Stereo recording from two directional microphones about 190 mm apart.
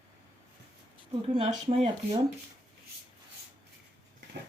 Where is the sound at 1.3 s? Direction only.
35° right (ahead or behind).